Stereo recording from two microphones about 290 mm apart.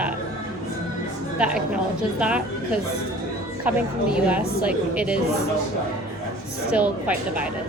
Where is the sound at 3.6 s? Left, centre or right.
Centre.